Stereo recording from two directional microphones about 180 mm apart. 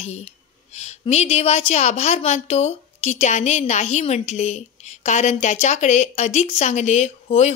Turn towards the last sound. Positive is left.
turn(degrees=35)  # may be behind; listen again after turning